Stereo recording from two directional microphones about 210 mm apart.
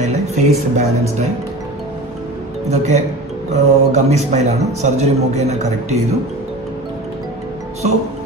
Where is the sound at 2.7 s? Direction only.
35° right (ahead or behind).